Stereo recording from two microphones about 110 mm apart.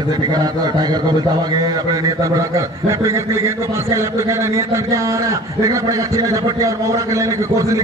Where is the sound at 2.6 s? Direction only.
25° right (ahead or behind).